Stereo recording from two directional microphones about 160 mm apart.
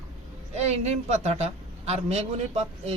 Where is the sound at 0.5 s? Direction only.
45° right (ahead or behind).